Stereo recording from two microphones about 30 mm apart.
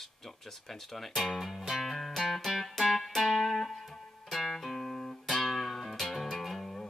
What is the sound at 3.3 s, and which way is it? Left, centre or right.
Music, centre.